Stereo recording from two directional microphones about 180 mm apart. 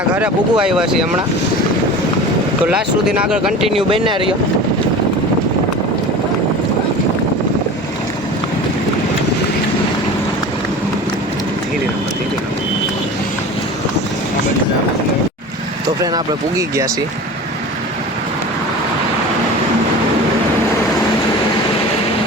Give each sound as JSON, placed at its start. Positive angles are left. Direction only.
{"t": 0.2, "sound": "speech", "side_deg": -5}
{"t": 2.6, "sound": "speech", "side_deg": -5}
{"t": 3.8, "sound": "speech", "side_deg": -30}
{"t": 16.0, "sound": "speech", "side_deg": -20}